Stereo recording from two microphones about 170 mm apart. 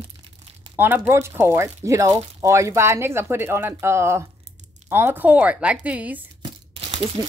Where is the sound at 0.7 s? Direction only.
10° right (ahead or behind).